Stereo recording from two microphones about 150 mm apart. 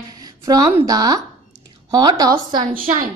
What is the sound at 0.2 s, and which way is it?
A woman's voice, 25° right (ahead or behind).